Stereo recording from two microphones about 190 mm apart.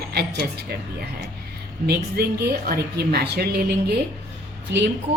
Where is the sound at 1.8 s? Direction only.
55° right (ahead or behind).